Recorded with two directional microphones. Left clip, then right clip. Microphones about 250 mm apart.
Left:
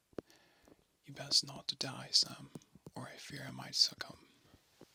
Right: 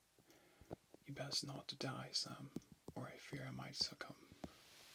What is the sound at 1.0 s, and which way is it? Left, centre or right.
Speech, left.